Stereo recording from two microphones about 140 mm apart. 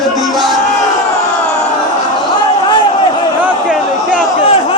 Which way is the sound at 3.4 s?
5° right (ahead or behind).